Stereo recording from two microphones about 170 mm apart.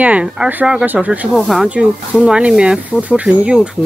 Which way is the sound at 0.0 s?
5° right (ahead or behind).